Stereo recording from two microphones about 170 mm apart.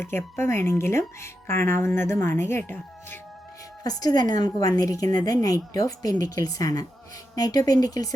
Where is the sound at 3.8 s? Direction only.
20° left (ahead or behind).